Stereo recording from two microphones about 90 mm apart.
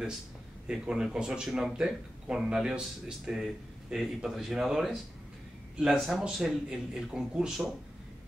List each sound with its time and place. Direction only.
0.7 s speech: 10° right (ahead or behind)